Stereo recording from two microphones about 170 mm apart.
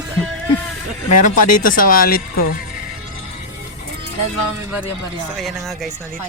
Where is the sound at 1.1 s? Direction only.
55° left (ahead or behind).